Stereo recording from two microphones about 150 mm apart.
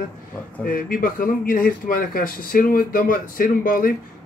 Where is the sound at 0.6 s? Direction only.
70° left (ahead or behind).